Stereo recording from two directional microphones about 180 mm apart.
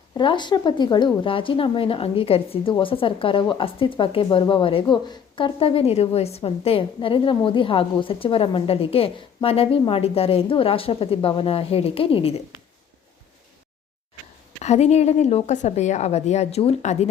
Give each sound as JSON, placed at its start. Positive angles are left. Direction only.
{"t": 0.1, "sound": "a woman's voice", "side_deg": 25}
{"t": 14.6, "sound": "a woman's voice", "side_deg": 40}